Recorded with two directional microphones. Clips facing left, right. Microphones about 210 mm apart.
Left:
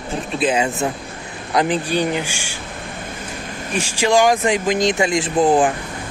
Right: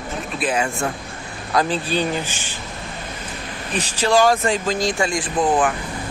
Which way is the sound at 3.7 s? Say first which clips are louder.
Left 1 dB; 10° left (ahead or behind).